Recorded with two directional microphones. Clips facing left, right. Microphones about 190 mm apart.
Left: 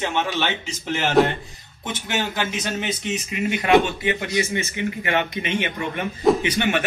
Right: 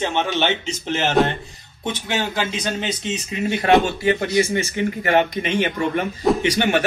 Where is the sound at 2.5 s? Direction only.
25° right (ahead or behind).